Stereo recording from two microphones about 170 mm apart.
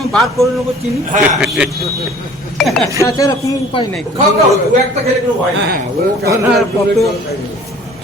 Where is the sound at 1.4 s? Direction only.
5° right (ahead or behind).